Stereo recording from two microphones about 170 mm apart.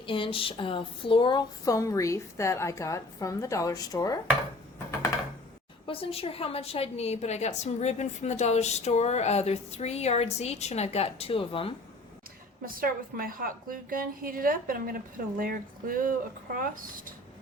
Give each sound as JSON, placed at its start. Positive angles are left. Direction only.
{"t": 0.0, "sound": "speech", "side_deg": 30}
{"t": 5.8, "sound": "a woman's voice", "side_deg": 35}
{"t": 12.6, "sound": "a woman's voice", "side_deg": -55}